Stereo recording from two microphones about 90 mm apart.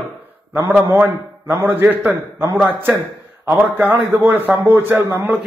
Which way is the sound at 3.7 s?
20° right (ahead or behind).